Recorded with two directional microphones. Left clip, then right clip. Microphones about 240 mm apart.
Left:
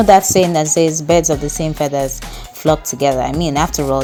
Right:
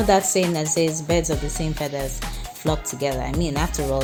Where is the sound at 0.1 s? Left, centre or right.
Left.